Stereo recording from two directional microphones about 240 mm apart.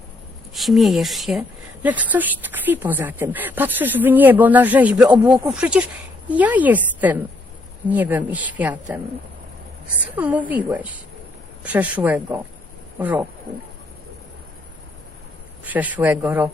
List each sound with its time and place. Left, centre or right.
0.5 s a woman's voice: centre
5.1 s speech: centre
5.5 s a woman's voice: centre
10.2 s a woman's voice: centre
11.6 s a woman's voice: centre
15.6 s a woman's voice: centre